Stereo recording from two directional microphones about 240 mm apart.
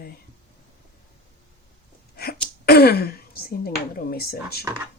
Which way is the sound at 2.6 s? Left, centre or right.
Left.